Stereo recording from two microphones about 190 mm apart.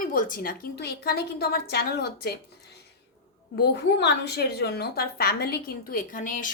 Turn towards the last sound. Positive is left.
turn(degrees=45)  # may be behind; listen again after turning